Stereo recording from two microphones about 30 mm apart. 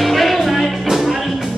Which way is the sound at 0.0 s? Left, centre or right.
Centre.